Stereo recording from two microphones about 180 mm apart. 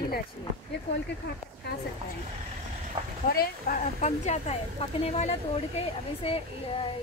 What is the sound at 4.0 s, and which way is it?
Speech, 35° left (ahead or behind).